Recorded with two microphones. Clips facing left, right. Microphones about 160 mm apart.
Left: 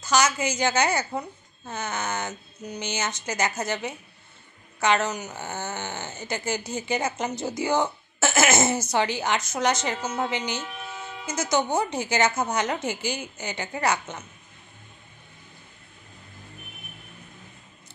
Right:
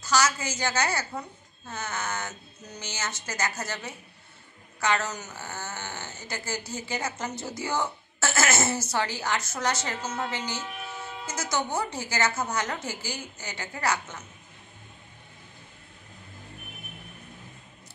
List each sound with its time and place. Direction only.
0.0 s speech: 20° left (ahead or behind)